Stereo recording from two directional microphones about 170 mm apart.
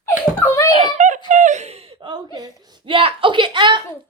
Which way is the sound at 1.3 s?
45° right (ahead or behind).